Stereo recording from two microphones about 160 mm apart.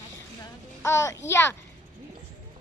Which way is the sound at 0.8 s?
20° left (ahead or behind).